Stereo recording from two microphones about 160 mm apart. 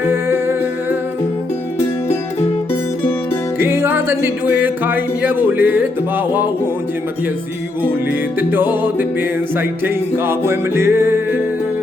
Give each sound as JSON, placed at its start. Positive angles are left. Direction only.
{"t": 0.0, "sound": "music", "side_deg": -15}
{"t": 3.6, "sound": "music", "side_deg": -15}
{"t": 8.7, "sound": "music", "side_deg": -10}